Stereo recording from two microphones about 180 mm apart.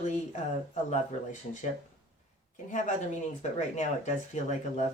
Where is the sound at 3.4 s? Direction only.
40° left (ahead or behind).